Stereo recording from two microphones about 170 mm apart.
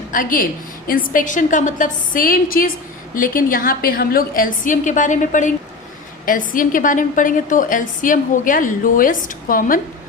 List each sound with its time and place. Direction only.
0.1 s a woman's voice: 55° left (ahead or behind)